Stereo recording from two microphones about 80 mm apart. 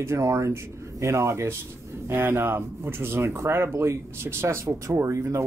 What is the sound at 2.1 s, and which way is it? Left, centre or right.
Speech, right.